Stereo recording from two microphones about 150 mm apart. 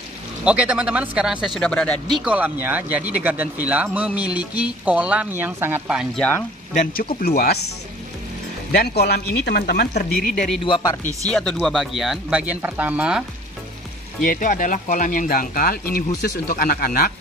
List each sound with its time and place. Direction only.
0.5 s speech: 10° right (ahead or behind)
6.7 s speech: 55° left (ahead or behind)
7.2 s speech: 90° left
8.7 s speech: 90° left
10.1 s speech: 60° left (ahead or behind)
10.6 s speech: 30° left (ahead or behind)
11.3 s speech: 5° left (ahead or behind)
14.2 s speech: 65° left (ahead or behind); by 17.1 s 85° left